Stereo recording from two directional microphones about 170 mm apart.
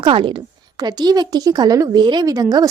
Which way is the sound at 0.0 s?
30° right (ahead or behind).